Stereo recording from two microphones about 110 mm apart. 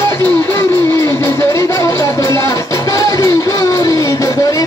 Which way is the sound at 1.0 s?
25° left (ahead or behind).